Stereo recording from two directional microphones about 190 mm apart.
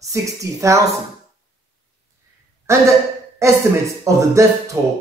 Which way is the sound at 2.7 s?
15° right (ahead or behind).